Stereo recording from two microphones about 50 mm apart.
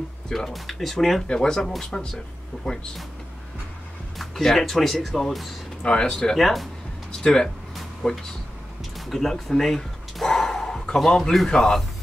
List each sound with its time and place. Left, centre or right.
0.3 s speech: centre
1.2 s speech: centre
1.7 s speech: centre
2.6 s speech: centre
4.2 s speech: centre
5.8 s speech: centre
6.3 s speech: centre
7.1 s speech: centre
8.0 s speech: centre
8.9 s bow-wow: centre
11.3 s speech: centre